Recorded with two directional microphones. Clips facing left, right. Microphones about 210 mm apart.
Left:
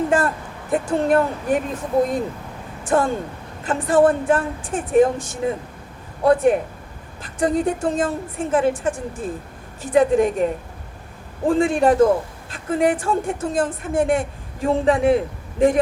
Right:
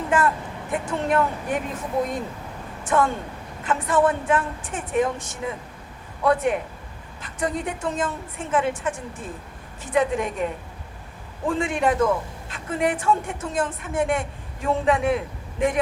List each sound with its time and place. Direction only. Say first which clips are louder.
0.1 s speech: left 2 dB; 30° left (ahead or behind)
2.8 s a woman's voice: left 3 dB; 30° left (ahead or behind)